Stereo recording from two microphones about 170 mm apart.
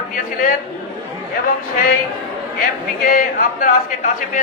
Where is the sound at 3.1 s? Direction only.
55° left (ahead or behind).